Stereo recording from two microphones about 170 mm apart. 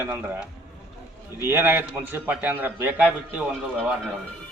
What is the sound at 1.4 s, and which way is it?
A man's voice, 15° right (ahead or behind).